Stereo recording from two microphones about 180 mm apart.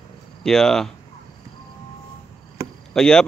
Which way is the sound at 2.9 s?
5° left (ahead or behind).